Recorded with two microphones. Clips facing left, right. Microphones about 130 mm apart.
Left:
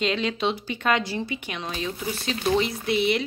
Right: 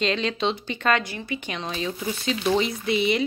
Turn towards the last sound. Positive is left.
turn(degrees=0)  # may be behind; listen again after turning